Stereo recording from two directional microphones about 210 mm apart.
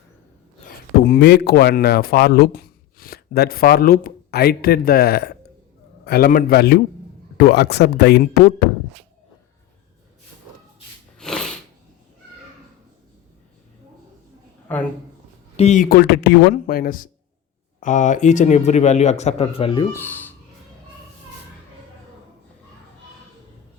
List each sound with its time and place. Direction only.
1.0 s a man's voice: 50° left (ahead or behind)
11.2 s a sound: centre (ahead or behind)
14.7 s speech: 10° left (ahead or behind)
15.5 s a man's voice: 35° left (ahead or behind)
19.9 s speech: 10° left (ahead or behind)